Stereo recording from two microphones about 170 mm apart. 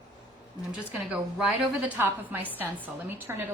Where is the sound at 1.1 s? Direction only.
5° right (ahead or behind).